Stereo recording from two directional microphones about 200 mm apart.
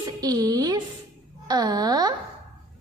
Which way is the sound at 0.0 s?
20° right (ahead or behind).